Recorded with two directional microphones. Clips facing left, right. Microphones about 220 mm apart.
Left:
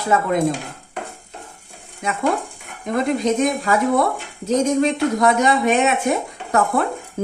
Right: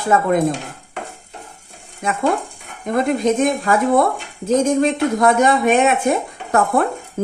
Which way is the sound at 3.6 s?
50° right (ahead or behind).